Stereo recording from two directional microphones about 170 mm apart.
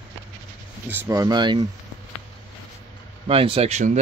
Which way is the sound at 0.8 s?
15° right (ahead or behind).